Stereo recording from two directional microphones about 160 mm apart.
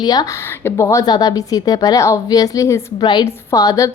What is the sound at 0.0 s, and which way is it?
A woman's voice, 25° left (ahead or behind).